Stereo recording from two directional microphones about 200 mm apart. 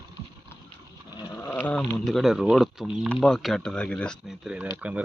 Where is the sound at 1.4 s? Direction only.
10° left (ahead or behind); by 5.0 s 5° right (ahead or behind).